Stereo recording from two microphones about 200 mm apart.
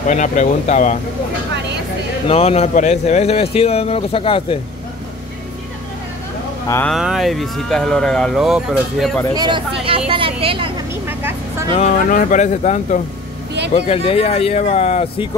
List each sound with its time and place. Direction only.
0.1 s speech: 40° left (ahead or behind)
2.2 s speech: 30° left (ahead or behind)
6.9 s speech: centre (ahead or behind)
9.3 s speech: 20° right (ahead or behind)
11.7 s speech: 35° left (ahead or behind)